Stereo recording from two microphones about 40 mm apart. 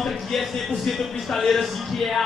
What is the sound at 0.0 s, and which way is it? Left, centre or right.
Speech, centre.